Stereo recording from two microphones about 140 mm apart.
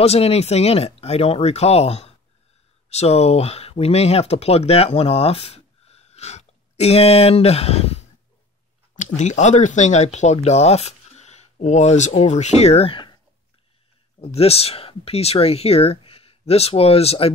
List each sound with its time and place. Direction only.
0.0 s speech: 50° left (ahead or behind)
8.9 s speech: 60° left (ahead or behind); by 13.1 s 40° left (ahead or behind)
14.2 s speech: 45° left (ahead or behind)